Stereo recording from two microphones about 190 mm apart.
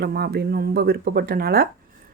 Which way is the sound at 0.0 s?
55° right (ahead or behind).